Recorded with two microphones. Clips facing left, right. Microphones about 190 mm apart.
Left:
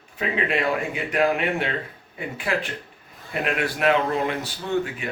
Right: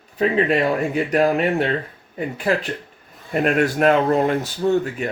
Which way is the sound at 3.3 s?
45° right (ahead or behind).